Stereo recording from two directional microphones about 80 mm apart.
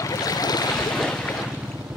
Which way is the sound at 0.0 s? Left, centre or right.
Left.